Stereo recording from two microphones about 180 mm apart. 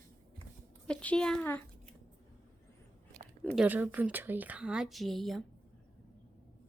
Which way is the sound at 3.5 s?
5° right (ahead or behind).